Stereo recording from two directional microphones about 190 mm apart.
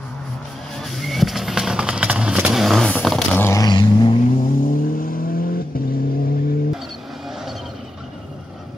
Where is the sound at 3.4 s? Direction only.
20° left (ahead or behind).